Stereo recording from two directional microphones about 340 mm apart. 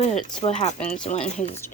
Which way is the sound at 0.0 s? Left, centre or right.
Centre.